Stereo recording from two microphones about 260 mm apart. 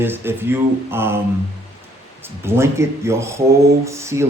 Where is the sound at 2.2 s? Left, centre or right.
Centre.